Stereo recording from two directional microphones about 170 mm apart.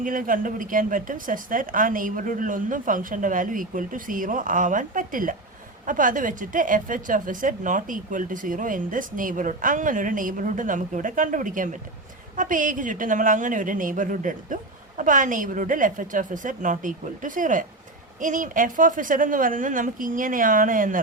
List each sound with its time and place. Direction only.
0.0 s a woman's voice: 55° right (ahead or behind)